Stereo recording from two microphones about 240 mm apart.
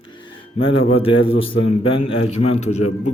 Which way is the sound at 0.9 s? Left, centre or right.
Left.